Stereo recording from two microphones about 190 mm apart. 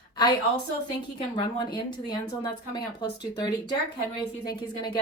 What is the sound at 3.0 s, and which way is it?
Speech, 20° left (ahead or behind).